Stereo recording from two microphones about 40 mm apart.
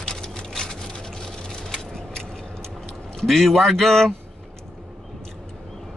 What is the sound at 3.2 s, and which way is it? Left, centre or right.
Speech, centre.